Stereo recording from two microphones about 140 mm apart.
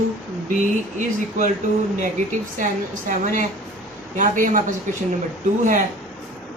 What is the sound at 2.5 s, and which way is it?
A woman's voice, 65° right (ahead or behind).